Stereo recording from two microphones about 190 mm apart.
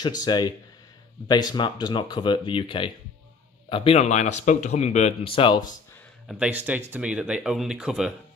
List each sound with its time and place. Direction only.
0.0 s speech: 20° left (ahead or behind)
6.4 s speech: 10° right (ahead or behind)